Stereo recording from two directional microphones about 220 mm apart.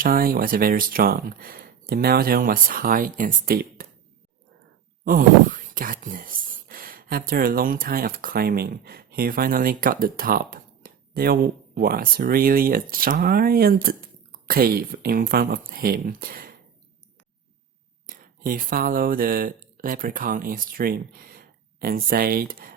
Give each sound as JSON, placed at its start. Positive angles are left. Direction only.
{"t": 0.0, "sound": "speech", "side_deg": -40}
{"t": 5.0, "sound": "speech", "side_deg": -40}
{"t": 18.0, "sound": "speech", "side_deg": -40}